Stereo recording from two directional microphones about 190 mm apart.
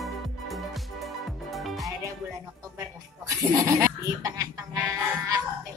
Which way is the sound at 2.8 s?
15° right (ahead or behind).